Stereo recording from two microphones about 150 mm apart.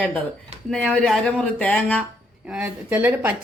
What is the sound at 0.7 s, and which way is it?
Speech, 5° left (ahead or behind).